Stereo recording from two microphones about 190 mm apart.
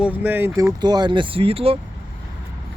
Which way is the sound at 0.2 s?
10° right (ahead or behind).